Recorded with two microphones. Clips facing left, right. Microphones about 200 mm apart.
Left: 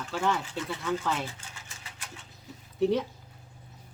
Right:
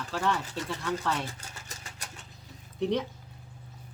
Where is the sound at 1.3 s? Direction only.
40° right (ahead or behind).